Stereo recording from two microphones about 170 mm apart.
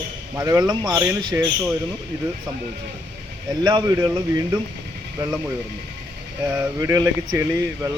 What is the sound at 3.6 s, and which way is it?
Speech, 20° right (ahead or behind).